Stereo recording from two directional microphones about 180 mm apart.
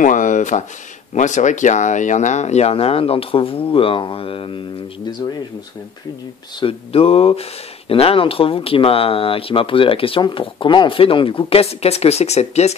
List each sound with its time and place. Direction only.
0.0 s speech: 45° left (ahead or behind); by 4.6 s 30° left (ahead or behind)
6.6 s speech: 30° left (ahead or behind)